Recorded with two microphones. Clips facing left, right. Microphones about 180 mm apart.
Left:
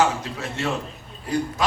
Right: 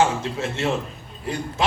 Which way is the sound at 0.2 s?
25° right (ahead or behind).